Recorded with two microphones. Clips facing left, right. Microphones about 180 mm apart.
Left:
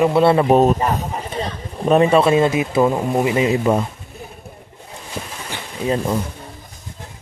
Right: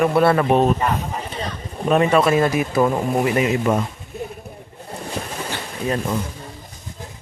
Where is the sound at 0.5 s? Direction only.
40° left (ahead or behind).